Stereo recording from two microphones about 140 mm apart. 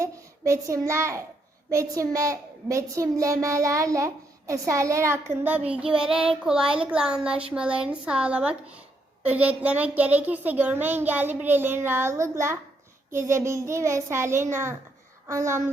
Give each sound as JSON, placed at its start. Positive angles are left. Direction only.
{"t": 0.0, "sound": "a child's voice", "side_deg": -20}